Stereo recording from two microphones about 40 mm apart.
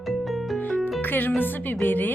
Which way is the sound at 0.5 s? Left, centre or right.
Left.